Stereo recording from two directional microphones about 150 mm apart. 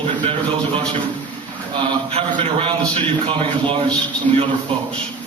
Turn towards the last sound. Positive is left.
turn(degrees=-45)  # may be behind; listen again after turning